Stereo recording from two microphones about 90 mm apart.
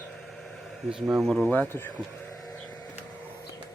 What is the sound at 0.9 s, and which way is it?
Speech, 10° right (ahead or behind).